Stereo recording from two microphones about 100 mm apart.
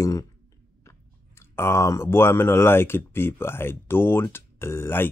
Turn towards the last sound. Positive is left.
turn(degrees=25)  # may be behind; listen again after turning